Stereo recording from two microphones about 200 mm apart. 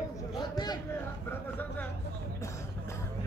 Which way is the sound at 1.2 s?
10° left (ahead or behind).